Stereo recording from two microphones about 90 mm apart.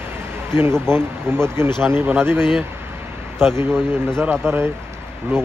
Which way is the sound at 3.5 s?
25° right (ahead or behind).